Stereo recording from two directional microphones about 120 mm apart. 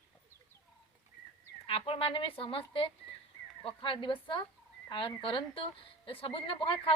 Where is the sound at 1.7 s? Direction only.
50° left (ahead or behind).